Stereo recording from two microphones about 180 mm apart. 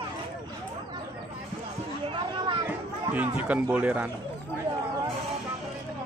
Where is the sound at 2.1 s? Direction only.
25° right (ahead or behind).